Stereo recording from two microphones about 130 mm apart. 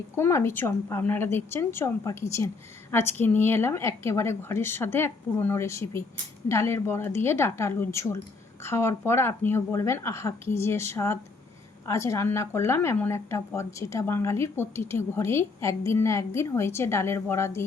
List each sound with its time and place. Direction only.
0.2 s speech: 20° left (ahead or behind)